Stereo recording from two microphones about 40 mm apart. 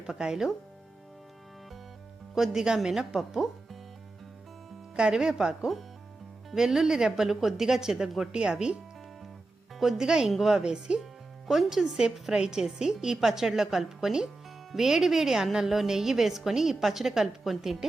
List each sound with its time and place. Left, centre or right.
0.0 s a woman's voice: centre
2.3 s a woman's voice: centre
4.9 s a woman's voice: right
10.0 s a woman's voice: centre
10.6 s speech: right
11.4 s a woman's voice: centre